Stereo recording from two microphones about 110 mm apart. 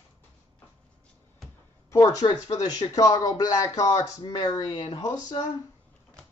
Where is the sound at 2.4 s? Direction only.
35° left (ahead or behind).